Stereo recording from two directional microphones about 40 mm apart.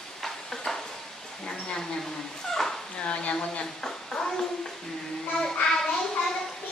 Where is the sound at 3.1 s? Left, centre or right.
Left.